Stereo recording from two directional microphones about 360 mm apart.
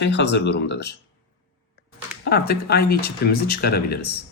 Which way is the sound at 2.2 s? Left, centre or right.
Left.